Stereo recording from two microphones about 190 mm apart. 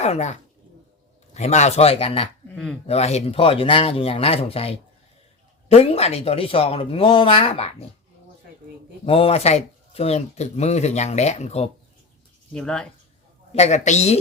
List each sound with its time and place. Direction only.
0.0 s speech: 35° left (ahead or behind)
9.0 s speech: 30° left (ahead or behind)
12.5 s speech: 5° left (ahead or behind)
13.5 s speech: 35° left (ahead or behind)